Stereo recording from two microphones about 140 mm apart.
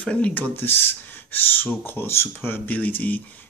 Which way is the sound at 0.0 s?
10° left (ahead or behind).